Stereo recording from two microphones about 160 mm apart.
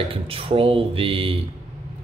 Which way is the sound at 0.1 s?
35° right (ahead or behind).